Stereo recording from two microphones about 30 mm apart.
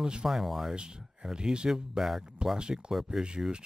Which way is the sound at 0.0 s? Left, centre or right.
Right.